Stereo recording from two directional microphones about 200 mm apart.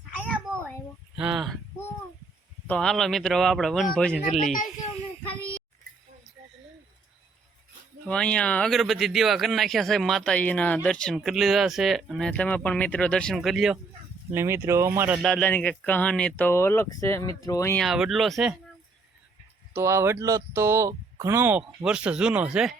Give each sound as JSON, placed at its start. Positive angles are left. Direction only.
{"t": 1.1, "sound": "a sound", "side_deg": -5}
{"t": 2.6, "sound": "speech", "side_deg": 5}
{"t": 4.5, "sound": "a sound", "side_deg": 40}
{"t": 8.0, "sound": "speech", "side_deg": 5}
{"t": 14.3, "sound": "speech", "side_deg": -10}
{"t": 15.2, "sound": "speech", "side_deg": 5}
{"t": 17.8, "sound": "speech", "side_deg": 0}
{"t": 19.7, "sound": "speech", "side_deg": -15}